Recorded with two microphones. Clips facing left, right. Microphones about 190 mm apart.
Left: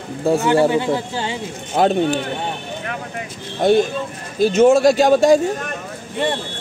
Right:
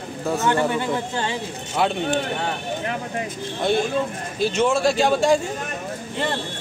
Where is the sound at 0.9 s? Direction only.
10° left (ahead or behind).